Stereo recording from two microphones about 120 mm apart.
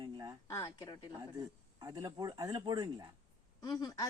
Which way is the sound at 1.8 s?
30° right (ahead or behind).